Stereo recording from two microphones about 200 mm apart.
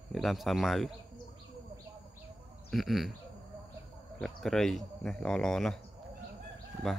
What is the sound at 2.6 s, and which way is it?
Speech, centre (ahead or behind).